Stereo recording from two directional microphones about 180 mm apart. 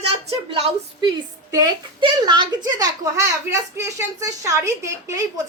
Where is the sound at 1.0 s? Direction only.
20° right (ahead or behind).